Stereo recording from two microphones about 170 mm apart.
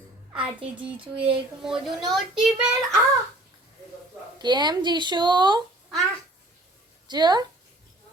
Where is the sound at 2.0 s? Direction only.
Centre (ahead or behind).